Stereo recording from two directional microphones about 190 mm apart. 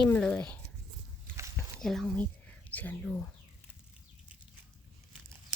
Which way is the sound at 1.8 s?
Centre (ahead or behind).